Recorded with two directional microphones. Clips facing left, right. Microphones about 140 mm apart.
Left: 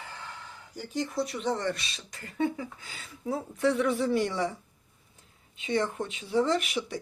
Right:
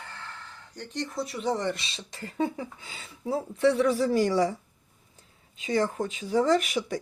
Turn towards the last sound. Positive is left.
turn(degrees=-45)  # may be behind; listen again after turning